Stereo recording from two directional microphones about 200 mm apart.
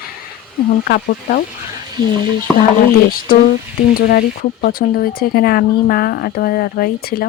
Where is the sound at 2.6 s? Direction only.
45° left (ahead or behind).